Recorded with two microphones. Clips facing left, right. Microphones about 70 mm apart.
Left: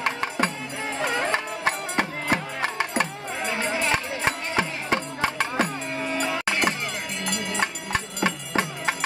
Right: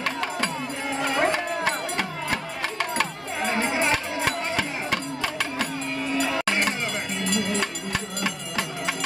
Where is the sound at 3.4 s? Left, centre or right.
Right.